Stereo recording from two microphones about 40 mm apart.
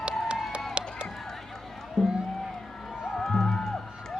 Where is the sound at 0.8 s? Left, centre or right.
Right.